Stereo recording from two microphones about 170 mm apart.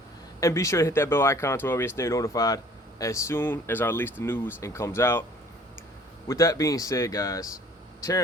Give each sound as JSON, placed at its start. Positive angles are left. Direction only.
{"t": 0.3, "sound": "speech", "side_deg": 20}
{"t": 6.2, "sound": "speech", "side_deg": 20}